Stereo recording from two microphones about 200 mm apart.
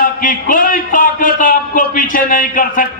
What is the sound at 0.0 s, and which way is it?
A man's voice, 45° left (ahead or behind).